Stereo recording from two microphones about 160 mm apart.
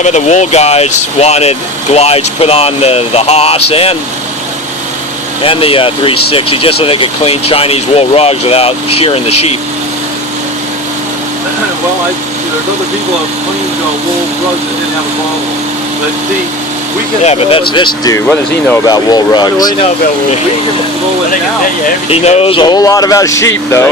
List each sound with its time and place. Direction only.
0.0 s speech: 45° left (ahead or behind)
5.4 s speech: 35° left (ahead or behind)
17.2 s speech: 35° left (ahead or behind)
22.1 s speech: 40° left (ahead or behind); by 23.9 s 15° left (ahead or behind)